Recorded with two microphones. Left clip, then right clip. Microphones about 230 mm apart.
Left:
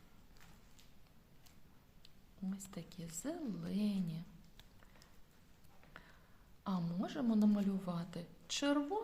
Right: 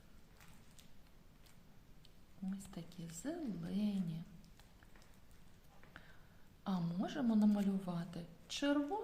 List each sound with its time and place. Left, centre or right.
2.5 s a woman's voice: left
6.0 s a sound: left
6.7 s a woman's voice: centre